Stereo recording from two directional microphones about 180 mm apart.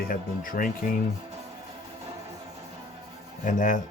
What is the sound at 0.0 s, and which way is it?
Speech, 50° left (ahead or behind).